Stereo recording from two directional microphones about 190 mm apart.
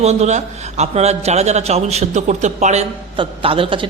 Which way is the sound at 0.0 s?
35° right (ahead or behind).